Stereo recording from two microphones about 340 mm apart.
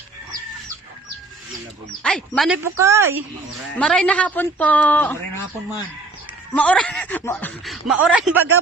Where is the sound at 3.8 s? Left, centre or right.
Centre.